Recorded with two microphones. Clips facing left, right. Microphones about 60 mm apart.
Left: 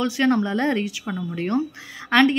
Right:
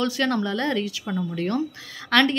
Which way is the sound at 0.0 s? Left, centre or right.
Left.